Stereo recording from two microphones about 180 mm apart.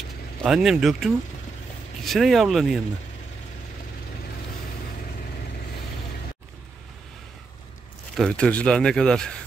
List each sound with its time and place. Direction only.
0.4 s a man's voice: 5° right (ahead or behind)
8.2 s a man's voice: 5° left (ahead or behind)